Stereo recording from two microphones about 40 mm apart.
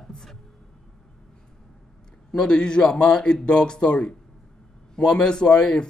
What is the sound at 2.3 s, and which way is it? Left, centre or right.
Speech, centre.